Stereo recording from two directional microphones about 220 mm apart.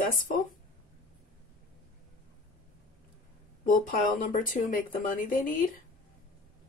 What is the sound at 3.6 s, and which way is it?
Speech, 35° left (ahead or behind).